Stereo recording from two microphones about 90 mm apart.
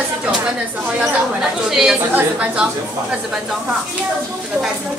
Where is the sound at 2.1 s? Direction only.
15° right (ahead or behind).